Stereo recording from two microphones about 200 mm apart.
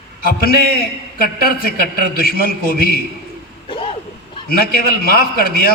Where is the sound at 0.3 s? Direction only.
45° left (ahead or behind).